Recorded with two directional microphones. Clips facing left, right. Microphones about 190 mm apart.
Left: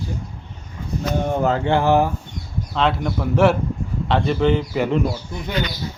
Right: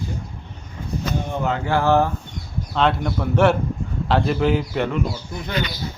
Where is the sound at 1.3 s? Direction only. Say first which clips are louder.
Left 5 dB; 40° left (ahead or behind).